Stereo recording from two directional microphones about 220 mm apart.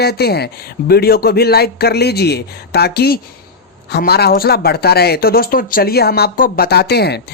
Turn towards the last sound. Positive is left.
turn(degrees=50)  # may be behind; listen again after turning